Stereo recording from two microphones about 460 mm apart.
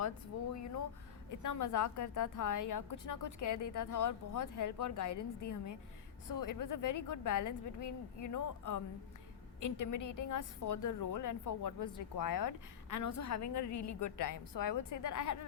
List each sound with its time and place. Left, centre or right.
0.0 s a woman's voice: left
6.2 s a woman's voice: left